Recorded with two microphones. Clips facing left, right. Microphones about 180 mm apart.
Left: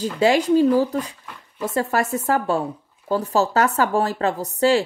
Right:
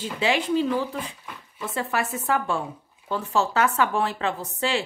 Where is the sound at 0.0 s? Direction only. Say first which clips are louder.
Left 7 dB; 40° left (ahead or behind).